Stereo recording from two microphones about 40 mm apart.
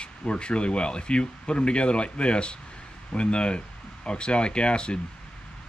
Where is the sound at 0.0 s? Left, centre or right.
Left.